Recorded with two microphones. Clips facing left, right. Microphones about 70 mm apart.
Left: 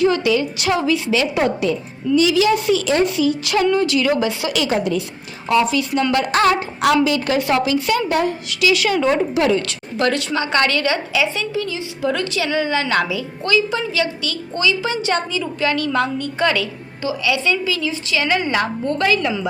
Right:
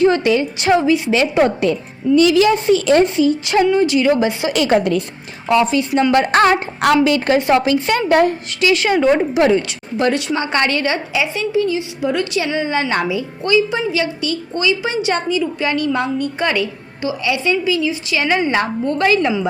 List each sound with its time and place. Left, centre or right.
0.0 s a woman's voice: right
1.1 s a woman's voice: right
4.5 s a woman's voice: right
5.5 s a woman's voice: right
5.9 s a woman's voice: right
6.1 s a woman's voice: right
7.3 s a woman's voice: right
7.6 s a woman's voice: right